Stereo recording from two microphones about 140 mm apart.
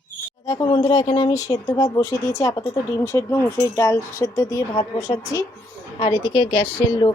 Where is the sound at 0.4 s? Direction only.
30° left (ahead or behind).